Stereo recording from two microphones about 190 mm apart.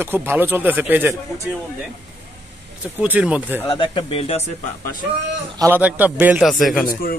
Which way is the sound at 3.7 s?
25° left (ahead or behind).